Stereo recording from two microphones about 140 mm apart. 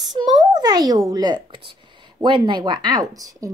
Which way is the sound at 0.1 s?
30° right (ahead or behind).